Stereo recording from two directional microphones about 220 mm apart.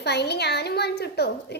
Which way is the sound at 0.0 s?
50° left (ahead or behind).